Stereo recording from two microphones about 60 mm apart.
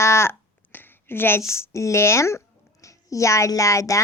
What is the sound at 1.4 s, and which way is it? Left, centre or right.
Speech, left.